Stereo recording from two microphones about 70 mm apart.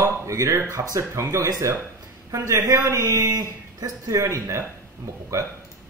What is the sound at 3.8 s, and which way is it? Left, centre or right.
Speech, right.